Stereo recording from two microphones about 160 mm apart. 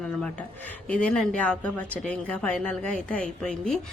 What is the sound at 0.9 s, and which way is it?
A woman's voice, 5° left (ahead or behind).